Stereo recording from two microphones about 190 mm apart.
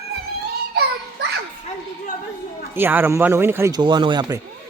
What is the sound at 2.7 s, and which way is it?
Speech, 10° right (ahead or behind).